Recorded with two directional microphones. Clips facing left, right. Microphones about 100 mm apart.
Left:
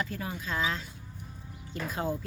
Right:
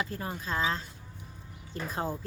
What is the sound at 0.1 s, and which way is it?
Speech, 30° right (ahead or behind).